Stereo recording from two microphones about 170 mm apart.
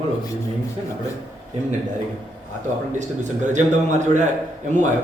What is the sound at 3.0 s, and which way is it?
A man's voice, 45° right (ahead or behind).